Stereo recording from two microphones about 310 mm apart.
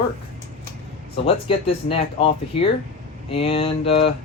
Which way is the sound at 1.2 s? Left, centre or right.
Centre.